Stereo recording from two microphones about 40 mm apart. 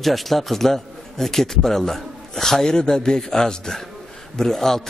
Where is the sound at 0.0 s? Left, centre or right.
Centre.